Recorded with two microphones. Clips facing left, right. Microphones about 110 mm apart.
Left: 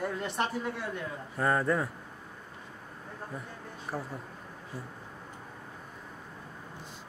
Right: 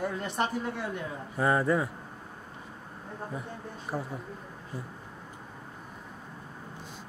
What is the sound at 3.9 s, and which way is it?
Speech, 25° right (ahead or behind).